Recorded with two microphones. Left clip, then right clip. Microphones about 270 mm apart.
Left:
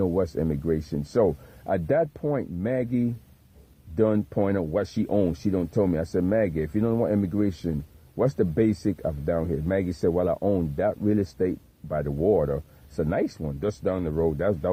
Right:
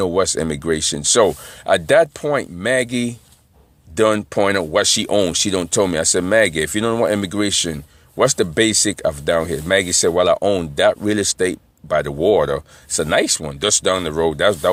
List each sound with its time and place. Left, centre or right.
0.0 s speech: right
3.9 s speech: centre